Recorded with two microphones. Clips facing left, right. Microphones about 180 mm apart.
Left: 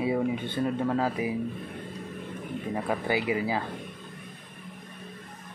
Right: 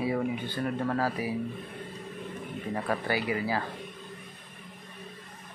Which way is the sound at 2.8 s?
20° left (ahead or behind).